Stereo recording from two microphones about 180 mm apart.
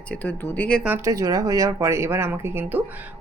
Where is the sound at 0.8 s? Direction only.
15° right (ahead or behind).